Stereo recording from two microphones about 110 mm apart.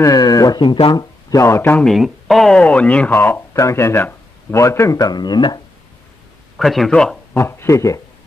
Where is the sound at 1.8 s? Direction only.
Centre (ahead or behind).